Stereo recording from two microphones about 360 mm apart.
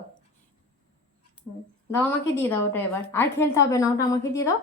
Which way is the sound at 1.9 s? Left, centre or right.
Centre.